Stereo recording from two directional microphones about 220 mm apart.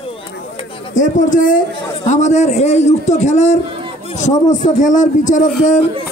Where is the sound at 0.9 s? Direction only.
35° left (ahead or behind).